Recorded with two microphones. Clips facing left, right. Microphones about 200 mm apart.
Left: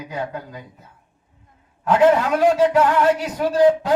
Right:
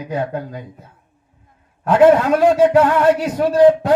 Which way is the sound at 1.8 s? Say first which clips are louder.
Right 4 dB; 55° right (ahead or behind).